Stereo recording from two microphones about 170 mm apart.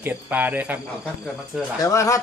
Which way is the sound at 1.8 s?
20° left (ahead or behind).